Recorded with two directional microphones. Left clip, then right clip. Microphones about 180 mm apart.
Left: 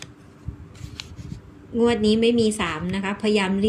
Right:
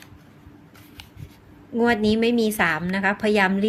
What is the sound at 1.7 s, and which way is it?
A woman's voice, 50° right (ahead or behind).